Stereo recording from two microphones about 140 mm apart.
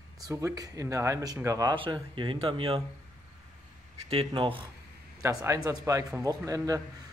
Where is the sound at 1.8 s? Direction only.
35° right (ahead or behind).